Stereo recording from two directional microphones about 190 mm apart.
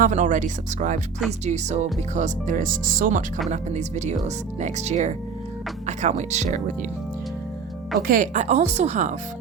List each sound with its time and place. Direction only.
0.0 s speech: 40° right (ahead or behind)
8.0 s speech: 45° right (ahead or behind)